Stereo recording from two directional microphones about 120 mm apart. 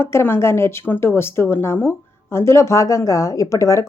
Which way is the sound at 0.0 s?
20° left (ahead or behind).